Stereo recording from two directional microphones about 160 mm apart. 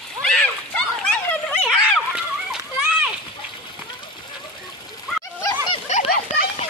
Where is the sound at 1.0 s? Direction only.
5° left (ahead or behind).